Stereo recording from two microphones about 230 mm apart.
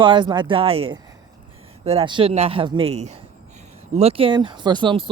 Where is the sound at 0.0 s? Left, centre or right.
Centre.